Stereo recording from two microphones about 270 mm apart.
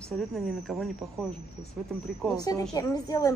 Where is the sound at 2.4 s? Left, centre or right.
Centre.